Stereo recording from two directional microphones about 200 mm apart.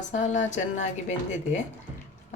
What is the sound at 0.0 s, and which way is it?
A woman's voice, 35° left (ahead or behind).